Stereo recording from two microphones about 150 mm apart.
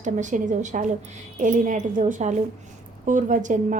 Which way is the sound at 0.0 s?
55° right (ahead or behind).